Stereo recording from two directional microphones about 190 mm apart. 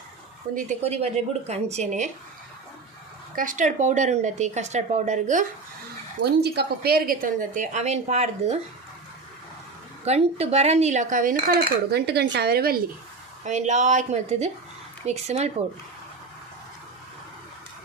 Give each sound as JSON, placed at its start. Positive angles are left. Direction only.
{"t": 0.5, "sound": "speech", "side_deg": -35}
{"t": 3.3, "sound": "speech", "side_deg": -45}
{"t": 6.2, "sound": "cutlery", "side_deg": -60}
{"t": 10.0, "sound": "cutlery", "side_deg": -35}
{"t": 13.4, "sound": "speech", "side_deg": -40}